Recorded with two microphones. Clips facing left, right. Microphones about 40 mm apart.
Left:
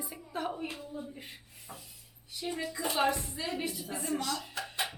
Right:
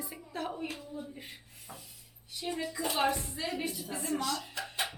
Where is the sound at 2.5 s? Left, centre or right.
Centre.